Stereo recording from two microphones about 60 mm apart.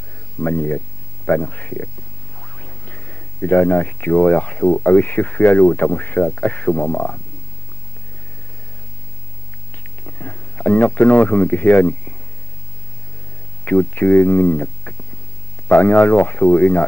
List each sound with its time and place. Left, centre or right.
0.4 s speech: left
2.4 s a sound: left
4.3 s speech: left
10.0 s speech: left
13.7 s speech: left